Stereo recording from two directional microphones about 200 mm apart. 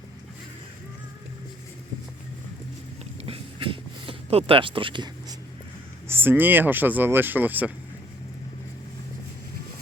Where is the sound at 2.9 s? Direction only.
30° right (ahead or behind).